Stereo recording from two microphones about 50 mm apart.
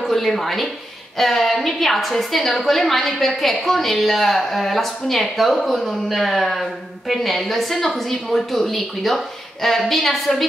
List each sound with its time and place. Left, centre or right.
0.0 s a woman's voice: centre